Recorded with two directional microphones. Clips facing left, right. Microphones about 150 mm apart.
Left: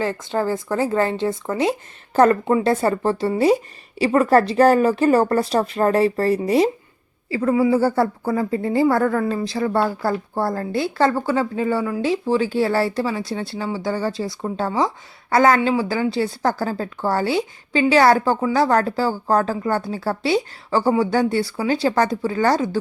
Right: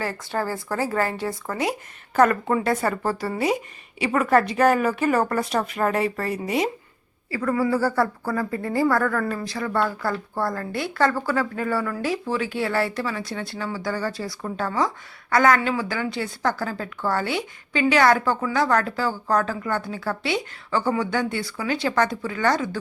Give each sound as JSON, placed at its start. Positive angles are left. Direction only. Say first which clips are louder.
{"t": 0.0, "sound": "a woman's voice", "louder": "left 5 dB", "side_deg": 20}